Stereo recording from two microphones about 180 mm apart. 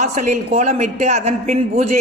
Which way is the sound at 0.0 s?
40° right (ahead or behind).